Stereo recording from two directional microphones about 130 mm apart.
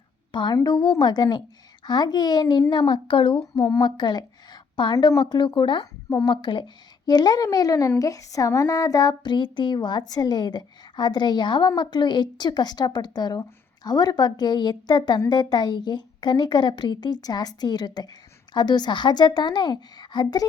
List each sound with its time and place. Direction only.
0.3 s a woman's voice: 35° left (ahead or behind)